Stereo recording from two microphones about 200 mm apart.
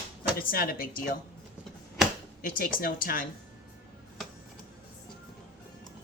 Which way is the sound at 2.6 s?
45° left (ahead or behind).